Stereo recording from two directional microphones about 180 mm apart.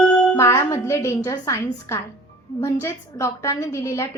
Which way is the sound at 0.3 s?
15° left (ahead or behind).